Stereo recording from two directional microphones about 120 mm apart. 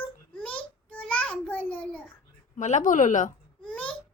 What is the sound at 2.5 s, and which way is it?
Speech, 80° left.